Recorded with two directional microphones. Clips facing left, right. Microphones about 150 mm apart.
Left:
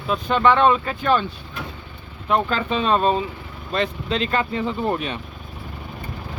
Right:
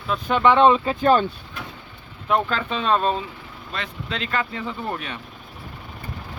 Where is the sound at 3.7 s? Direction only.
25° left (ahead or behind).